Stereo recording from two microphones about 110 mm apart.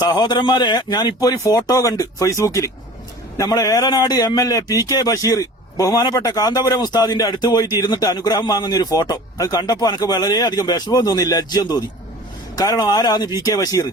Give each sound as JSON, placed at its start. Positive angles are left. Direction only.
{"t": 0.0, "sound": "a man's voice", "side_deg": 40}